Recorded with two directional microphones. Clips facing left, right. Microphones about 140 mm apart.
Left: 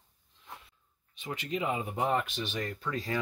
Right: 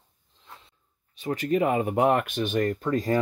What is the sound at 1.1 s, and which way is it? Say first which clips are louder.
Speech: right 10 dB; 40° right (ahead or behind).